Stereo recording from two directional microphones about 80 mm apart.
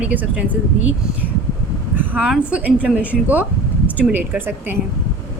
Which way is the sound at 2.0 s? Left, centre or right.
Centre.